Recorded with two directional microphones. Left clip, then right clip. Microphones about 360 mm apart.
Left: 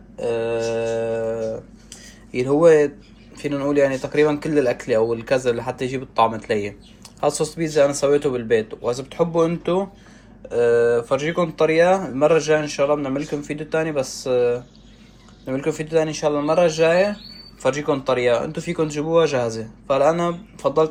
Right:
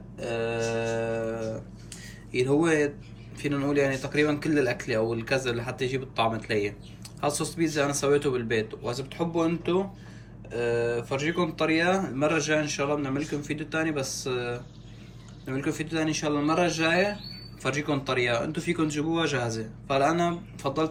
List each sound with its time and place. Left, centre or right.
0.2 s mantra: centre
2.3 s speech: centre